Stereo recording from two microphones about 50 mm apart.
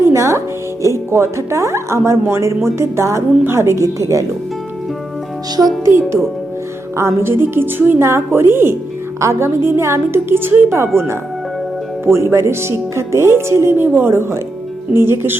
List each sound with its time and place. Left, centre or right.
0.0 s speech: right
5.6 s a woman's voice: right
6.9 s a woman's voice: right
8.0 s a woman's voice: right
9.2 s speech: right
9.6 s a woman's voice: right
10.7 s speech: right
14.1 s a woman's voice: right